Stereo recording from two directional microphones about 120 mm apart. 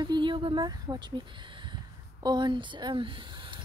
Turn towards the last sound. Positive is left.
turn(degrees=-40)  # may be behind; listen again after turning